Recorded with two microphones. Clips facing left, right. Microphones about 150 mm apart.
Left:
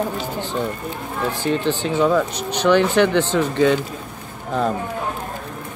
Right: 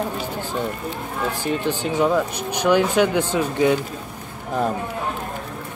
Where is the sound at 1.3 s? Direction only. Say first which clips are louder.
Left 3 dB; 10° right (ahead or behind).